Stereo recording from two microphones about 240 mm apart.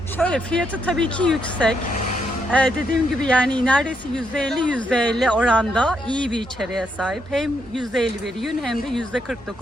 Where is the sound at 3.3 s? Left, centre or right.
Centre.